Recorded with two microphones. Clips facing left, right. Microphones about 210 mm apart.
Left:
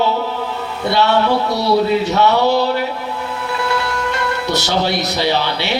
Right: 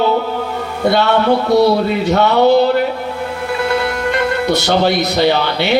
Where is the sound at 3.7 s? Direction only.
55° right (ahead or behind).